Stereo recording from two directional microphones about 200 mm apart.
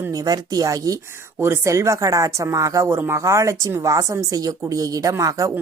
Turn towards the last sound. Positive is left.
turn(degrees=-15)  # may be behind; listen again after turning